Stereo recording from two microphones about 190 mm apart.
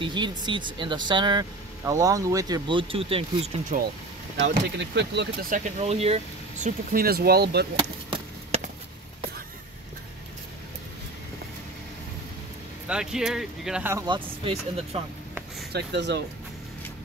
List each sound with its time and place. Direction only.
0.0 s speech: 25° right (ahead or behind)
4.4 s speech: 65° right (ahead or behind)
5.5 s speech: 35° right (ahead or behind)
6.9 s speech: 50° right (ahead or behind)
7.7 s chop: 30° right (ahead or behind)
12.8 s speech: 5° right (ahead or behind)
13.9 s speech: 25° right (ahead or behind)
15.7 s speech: 65° right (ahead or behind)